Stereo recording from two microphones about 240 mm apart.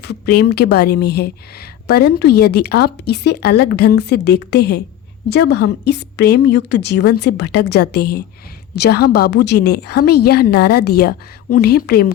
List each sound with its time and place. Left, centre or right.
0.0 s a woman's voice: left